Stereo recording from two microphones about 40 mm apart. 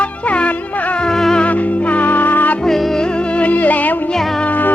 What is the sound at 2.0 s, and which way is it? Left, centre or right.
Music, left.